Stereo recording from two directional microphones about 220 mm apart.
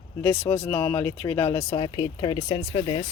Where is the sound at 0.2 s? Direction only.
15° left (ahead or behind).